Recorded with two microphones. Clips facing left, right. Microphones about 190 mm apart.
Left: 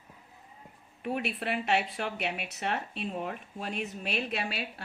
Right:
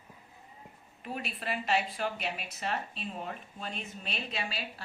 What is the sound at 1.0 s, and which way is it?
A woman's voice, 65° left (ahead or behind).